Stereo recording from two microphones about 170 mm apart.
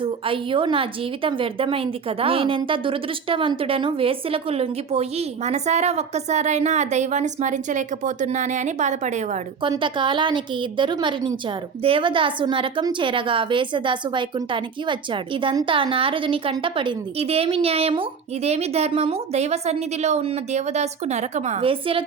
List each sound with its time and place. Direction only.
0.0 s a woman's voice: 30° right (ahead or behind)
9.6 s a woman's voice: 30° right (ahead or behind)